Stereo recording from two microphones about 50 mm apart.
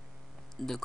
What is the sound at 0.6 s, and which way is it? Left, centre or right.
Speech, centre.